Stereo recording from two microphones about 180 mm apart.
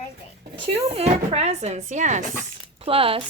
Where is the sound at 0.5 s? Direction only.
30° right (ahead or behind).